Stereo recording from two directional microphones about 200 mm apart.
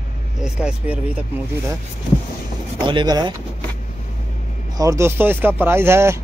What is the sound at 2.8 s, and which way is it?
Speech, 25° right (ahead or behind).